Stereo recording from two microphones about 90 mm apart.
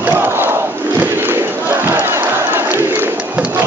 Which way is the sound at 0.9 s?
25° right (ahead or behind).